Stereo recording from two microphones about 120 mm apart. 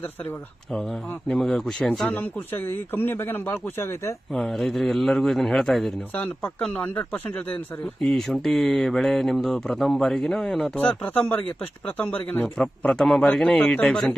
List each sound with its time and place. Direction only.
0.7 s speech: 5° left (ahead or behind)
2.0 s a man's voice: 15° left (ahead or behind)
4.3 s a man's voice: 5° left (ahead or behind)